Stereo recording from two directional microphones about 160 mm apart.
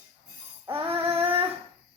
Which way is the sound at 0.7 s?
35° right (ahead or behind).